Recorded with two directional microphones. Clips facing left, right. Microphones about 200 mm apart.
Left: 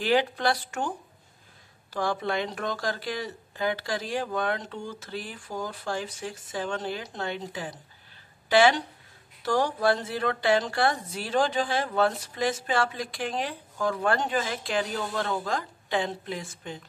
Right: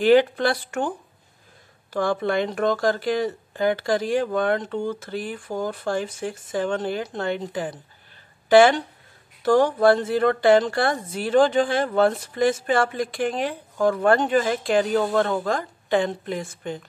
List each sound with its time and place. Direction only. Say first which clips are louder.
0.0 s a woman's voice: right 8 dB; 55° right (ahead or behind)